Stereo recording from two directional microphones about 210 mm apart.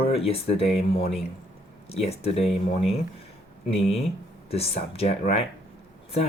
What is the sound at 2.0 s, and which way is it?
Speech, 30° left (ahead or behind).